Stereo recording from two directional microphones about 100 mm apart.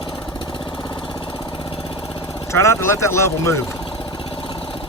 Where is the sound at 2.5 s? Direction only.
30° left (ahead or behind).